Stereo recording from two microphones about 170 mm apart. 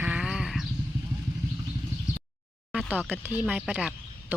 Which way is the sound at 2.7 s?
5° right (ahead or behind).